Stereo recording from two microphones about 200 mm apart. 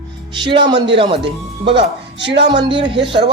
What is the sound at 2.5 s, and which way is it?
Speech, 25° right (ahead or behind).